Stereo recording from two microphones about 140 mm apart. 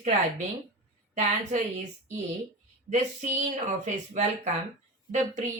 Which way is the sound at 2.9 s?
55° right (ahead or behind).